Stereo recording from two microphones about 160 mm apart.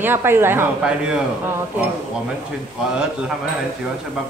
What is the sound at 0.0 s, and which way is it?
Speech, 15° right (ahead or behind).